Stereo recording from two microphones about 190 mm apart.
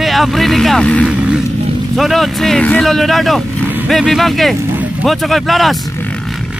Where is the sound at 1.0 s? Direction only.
5° right (ahead or behind).